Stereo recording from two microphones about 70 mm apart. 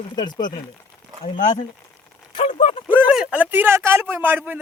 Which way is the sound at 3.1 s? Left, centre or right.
Centre.